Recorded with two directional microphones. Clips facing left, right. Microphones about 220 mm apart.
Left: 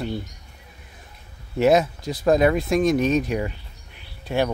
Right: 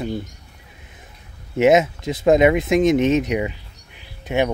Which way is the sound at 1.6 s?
20° right (ahead or behind).